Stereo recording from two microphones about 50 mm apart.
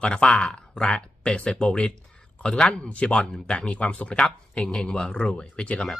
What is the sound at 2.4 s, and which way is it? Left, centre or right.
Music, centre.